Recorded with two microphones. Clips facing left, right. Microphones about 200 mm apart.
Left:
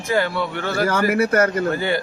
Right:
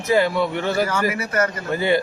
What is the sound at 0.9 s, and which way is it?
Speech, 55° left (ahead or behind).